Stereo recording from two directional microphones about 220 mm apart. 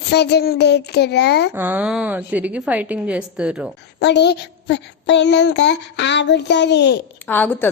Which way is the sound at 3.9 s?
50° left (ahead or behind).